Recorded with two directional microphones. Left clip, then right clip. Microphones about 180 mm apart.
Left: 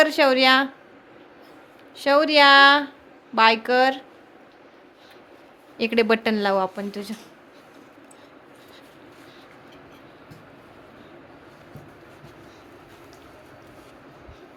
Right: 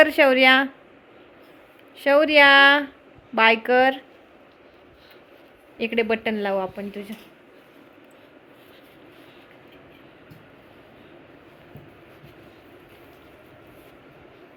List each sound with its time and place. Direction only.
0.0 s speech: centre (ahead or behind)
2.0 s speech: centre (ahead or behind)
5.7 s a woman's voice: 20° left (ahead or behind)